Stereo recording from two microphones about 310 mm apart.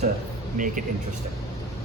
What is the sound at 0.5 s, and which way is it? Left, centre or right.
Speech, right.